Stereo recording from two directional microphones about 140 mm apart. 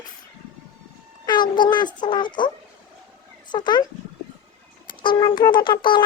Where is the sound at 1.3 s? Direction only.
35° left (ahead or behind).